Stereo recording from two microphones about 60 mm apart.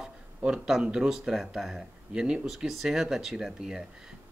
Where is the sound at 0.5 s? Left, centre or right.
Centre.